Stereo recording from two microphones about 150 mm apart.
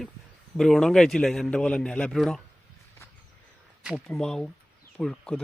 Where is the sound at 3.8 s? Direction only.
Centre (ahead or behind).